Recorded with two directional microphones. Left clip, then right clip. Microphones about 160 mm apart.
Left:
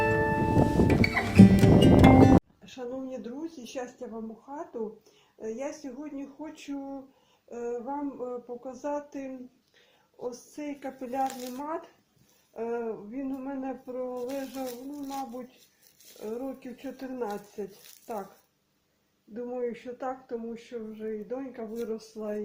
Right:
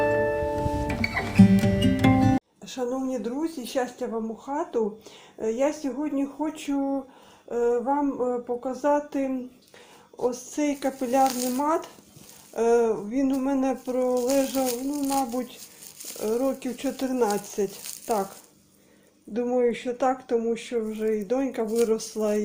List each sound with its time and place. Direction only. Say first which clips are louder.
0.0 s music: right 3 dB; centre (ahead or behind)
2.6 s speech: right 8 dB; 25° right (ahead or behind)
12.5 s speech: right 12 dB; 40° right (ahead or behind)
16.1 s speech: right 11 dB; 30° right (ahead or behind)
19.3 s speech: right 10 dB; 30° right (ahead or behind)